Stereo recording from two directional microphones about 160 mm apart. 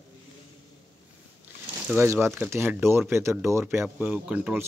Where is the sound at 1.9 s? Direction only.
15° right (ahead or behind).